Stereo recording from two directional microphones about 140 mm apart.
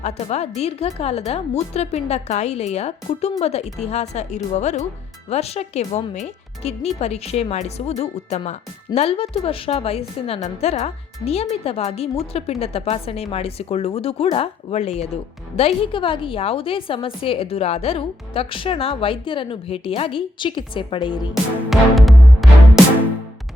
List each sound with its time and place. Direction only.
0.0 s a woman's voice: 50° left (ahead or behind)
21.7 s music: centre (ahead or behind)